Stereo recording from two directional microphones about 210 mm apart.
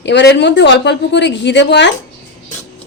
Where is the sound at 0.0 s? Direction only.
55° left (ahead or behind).